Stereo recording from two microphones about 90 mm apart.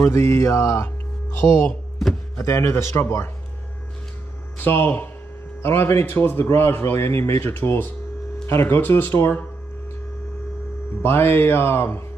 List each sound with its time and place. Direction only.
0.0 s a man's voice: 30° left (ahead or behind)
1.7 s a sound: centre (ahead or behind)
2.3 s speech: 30° left (ahead or behind)
4.6 s a man's voice: 25° left (ahead or behind)
11.0 s a man's voice: 25° left (ahead or behind)